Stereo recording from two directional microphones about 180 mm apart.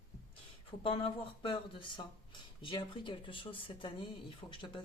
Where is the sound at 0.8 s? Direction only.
30° left (ahead or behind).